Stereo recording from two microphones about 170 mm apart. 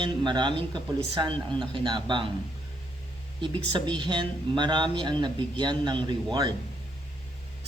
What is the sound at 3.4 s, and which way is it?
Speech, 30° right (ahead or behind).